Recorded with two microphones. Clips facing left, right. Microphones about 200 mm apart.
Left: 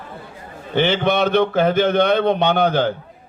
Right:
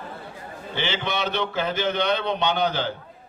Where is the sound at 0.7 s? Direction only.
55° left (ahead or behind).